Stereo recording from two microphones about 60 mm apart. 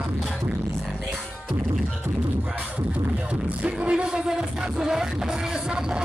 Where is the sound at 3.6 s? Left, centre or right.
Centre.